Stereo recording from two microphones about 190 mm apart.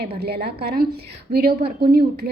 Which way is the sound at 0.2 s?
60° right (ahead or behind).